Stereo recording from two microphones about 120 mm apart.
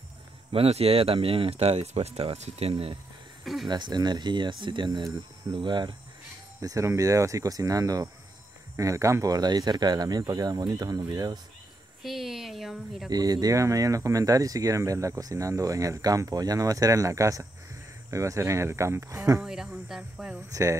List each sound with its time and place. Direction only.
0.5 s speech: 55° right (ahead or behind)
2.7 s speech: 50° right (ahead or behind)
3.6 s speech: 40° right (ahead or behind)
6.6 s speech: 25° right (ahead or behind)
12.0 s speech: centre (ahead or behind)
13.1 s speech: 30° right (ahead or behind)
19.4 s speech: 5° right (ahead or behind)